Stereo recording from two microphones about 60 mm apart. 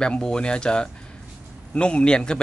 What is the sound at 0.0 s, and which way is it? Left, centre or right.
A man's voice, centre.